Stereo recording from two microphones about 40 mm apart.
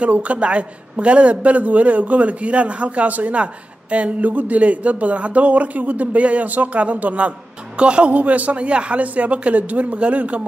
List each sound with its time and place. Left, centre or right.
0.0 s a man's voice: right